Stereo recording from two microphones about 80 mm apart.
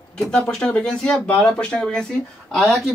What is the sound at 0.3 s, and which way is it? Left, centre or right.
Speech, centre.